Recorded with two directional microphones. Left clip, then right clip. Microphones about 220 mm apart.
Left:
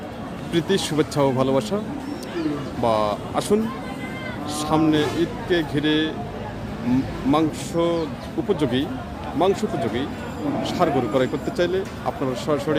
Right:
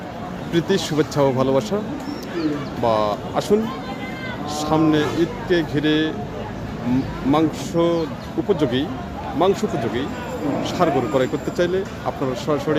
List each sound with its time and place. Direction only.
0.5 s speech: centre (ahead or behind)
2.8 s speech: centre (ahead or behind)
7.3 s speech: centre (ahead or behind)